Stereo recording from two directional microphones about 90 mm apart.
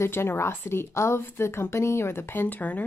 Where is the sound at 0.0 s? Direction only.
25° left (ahead or behind).